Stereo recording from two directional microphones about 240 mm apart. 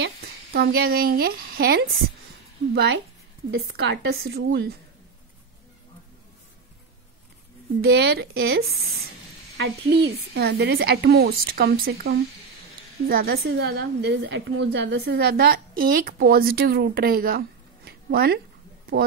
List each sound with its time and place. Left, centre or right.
0.0 s a woman's voice: right
7.9 s a woman's voice: right